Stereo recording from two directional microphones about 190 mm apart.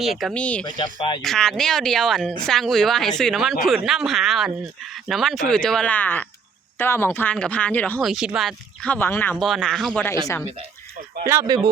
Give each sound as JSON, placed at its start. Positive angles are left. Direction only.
{"t": 0.0, "sound": "speech", "side_deg": 0}
{"t": 0.6, "sound": "speech", "side_deg": 25}
{"t": 1.2, "sound": "speech", "side_deg": 0}
{"t": 9.3, "sound": "speech", "side_deg": 0}
{"t": 11.3, "sound": "speech", "side_deg": -20}